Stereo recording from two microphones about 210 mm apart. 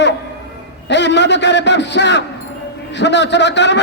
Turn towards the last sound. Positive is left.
turn(degrees=55)  # may be behind; listen again after turning